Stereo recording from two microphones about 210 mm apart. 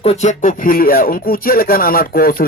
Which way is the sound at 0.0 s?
30° left (ahead or behind).